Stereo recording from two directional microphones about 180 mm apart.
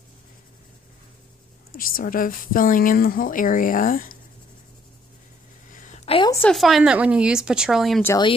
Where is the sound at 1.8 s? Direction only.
50° left (ahead or behind).